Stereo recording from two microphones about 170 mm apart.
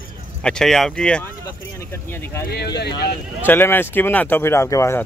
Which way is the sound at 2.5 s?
75° left (ahead or behind).